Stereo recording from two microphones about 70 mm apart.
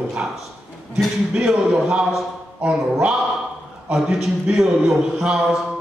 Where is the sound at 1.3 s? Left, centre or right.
Centre.